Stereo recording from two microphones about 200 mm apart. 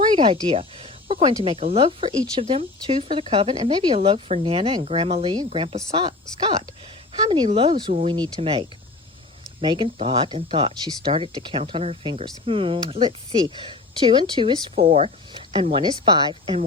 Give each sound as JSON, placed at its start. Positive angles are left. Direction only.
{"t": 0.0, "sound": "speech", "side_deg": -25}
{"t": 7.5, "sound": "speech", "side_deg": -25}